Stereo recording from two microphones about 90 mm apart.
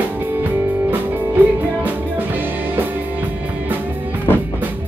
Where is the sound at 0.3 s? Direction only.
25° right (ahead or behind).